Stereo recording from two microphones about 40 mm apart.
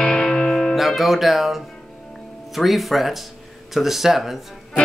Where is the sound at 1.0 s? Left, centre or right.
Centre.